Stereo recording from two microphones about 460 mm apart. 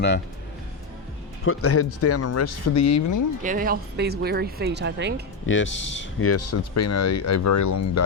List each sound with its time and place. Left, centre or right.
1.5 s speech: left
3.4 s speech: centre
5.5 s speech: left